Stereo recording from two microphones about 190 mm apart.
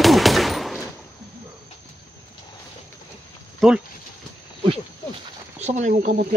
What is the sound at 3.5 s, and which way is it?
Speech, 5° right (ahead or behind).